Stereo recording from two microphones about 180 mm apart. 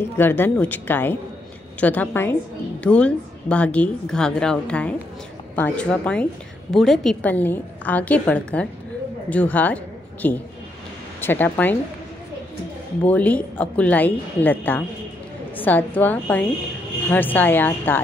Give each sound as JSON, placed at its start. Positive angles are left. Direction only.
{"t": 0.2, "sound": "a woman's voice", "side_deg": 10}
{"t": 13.0, "sound": "a woman's voice", "side_deg": 10}